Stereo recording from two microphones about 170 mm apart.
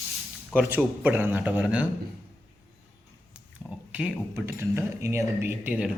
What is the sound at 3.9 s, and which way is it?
Speech, 10° right (ahead or behind).